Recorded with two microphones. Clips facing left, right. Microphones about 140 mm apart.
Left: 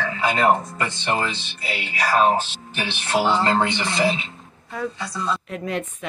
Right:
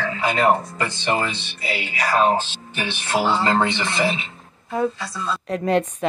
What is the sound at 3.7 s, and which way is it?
Speech, 20° left (ahead or behind).